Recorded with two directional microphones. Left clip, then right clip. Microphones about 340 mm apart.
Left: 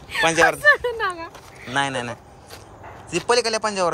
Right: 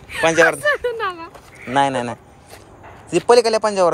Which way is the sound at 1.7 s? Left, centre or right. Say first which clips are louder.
Right 6 dB; centre.